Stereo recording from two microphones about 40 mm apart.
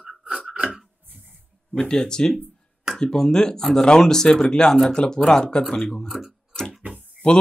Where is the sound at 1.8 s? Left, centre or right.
Centre.